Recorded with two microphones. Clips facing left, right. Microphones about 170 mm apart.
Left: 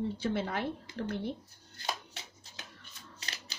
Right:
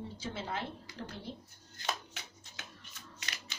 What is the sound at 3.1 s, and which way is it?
Typewriter, 30° left (ahead or behind).